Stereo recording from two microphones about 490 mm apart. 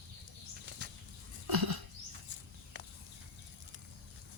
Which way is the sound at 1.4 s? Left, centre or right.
Right.